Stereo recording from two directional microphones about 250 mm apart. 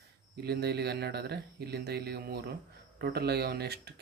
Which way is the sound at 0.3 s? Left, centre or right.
Right.